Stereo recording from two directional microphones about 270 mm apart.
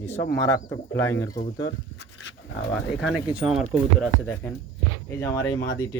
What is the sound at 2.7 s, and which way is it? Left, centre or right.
Speech, centre.